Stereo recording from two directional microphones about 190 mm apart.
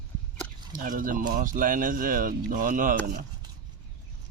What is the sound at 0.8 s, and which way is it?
Speech, 45° right (ahead or behind).